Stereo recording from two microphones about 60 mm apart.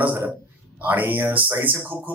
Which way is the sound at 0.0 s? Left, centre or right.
Right.